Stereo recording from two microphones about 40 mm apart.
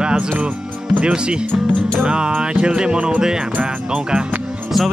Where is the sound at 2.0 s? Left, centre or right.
Right.